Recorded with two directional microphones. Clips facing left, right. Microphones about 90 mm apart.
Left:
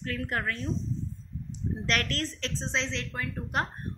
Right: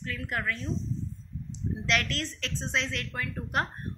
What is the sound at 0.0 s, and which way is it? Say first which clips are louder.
Speech: left 1 dB; 45° left (ahead or behind).